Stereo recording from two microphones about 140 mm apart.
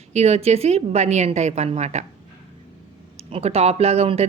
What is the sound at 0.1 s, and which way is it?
Speech, 50° right (ahead or behind).